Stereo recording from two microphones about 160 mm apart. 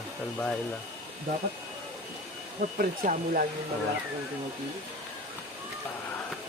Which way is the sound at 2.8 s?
60° right (ahead or behind).